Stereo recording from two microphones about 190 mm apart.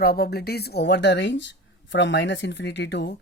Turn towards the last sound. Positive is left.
turn(degrees=65)  # may be behind; listen again after turning